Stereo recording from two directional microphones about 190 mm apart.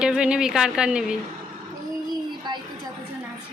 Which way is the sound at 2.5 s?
25° right (ahead or behind).